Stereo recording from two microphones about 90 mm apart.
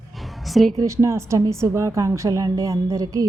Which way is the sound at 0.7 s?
35° right (ahead or behind).